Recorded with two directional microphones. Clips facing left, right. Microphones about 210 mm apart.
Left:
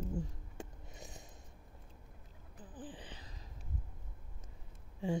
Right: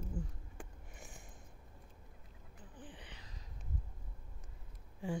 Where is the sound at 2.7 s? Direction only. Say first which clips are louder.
Left 6 dB; 35° left (ahead or behind).